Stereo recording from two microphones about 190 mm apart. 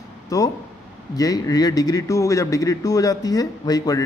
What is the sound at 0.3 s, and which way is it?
A man's voice, 20° left (ahead or behind).